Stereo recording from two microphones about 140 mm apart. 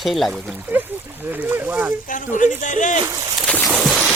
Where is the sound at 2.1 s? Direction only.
65° left (ahead or behind).